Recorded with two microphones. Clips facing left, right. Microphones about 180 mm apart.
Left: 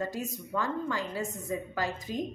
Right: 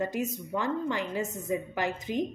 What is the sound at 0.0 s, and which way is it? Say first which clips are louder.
A woman's voice: right 4 dB; 20° right (ahead or behind).